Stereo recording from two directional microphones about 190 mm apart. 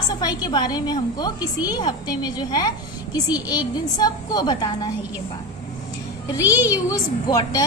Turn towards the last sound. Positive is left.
turn(degrees=20)  # may be behind; listen again after turning